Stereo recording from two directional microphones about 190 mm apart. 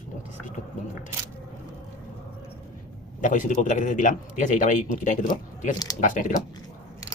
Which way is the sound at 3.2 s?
45° left (ahead or behind).